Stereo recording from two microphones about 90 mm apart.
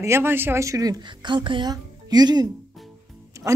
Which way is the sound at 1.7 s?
50° right (ahead or behind).